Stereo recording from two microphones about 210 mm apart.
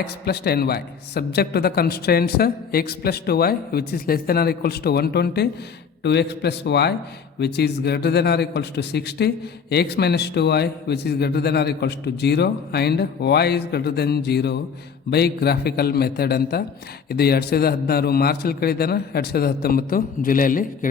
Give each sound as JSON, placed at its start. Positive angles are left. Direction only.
{"t": 0.3, "sound": "a man's voice", "side_deg": 50}